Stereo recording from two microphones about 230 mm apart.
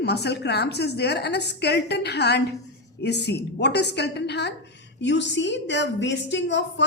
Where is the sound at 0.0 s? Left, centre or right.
Left.